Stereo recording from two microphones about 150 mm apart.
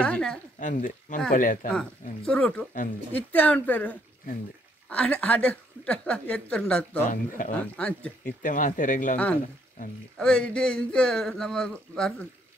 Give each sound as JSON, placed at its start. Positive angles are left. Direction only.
{"t": 0.0, "sound": "a woman's voice", "side_deg": 5}
{"t": 0.6, "sound": "speech", "side_deg": 60}
{"t": 1.7, "sound": "a woman's voice", "side_deg": 5}
{"t": 7.1, "sound": "speech", "side_deg": 60}
{"t": 7.5, "sound": "a woman's voice", "side_deg": 10}
{"t": 8.4, "sound": "speech", "side_deg": 60}
{"t": 9.1, "sound": "a woman's voice", "side_deg": 10}